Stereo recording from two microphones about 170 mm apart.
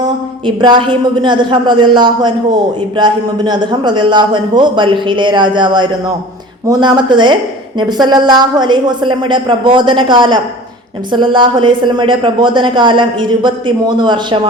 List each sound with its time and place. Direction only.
0.0 s a woman's voice: 25° right (ahead or behind)